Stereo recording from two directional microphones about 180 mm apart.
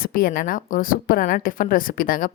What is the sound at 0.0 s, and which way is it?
A woman's voice, 55° left (ahead or behind).